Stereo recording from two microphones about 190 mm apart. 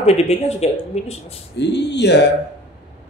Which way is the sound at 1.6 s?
65° left (ahead or behind).